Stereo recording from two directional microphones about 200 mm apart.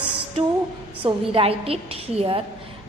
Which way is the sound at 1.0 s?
25° right (ahead or behind).